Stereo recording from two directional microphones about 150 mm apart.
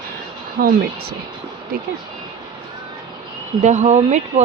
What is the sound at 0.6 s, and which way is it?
Speech, 80° right.